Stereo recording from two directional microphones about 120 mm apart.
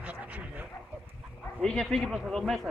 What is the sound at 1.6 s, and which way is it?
A man's voice, 5° left (ahead or behind).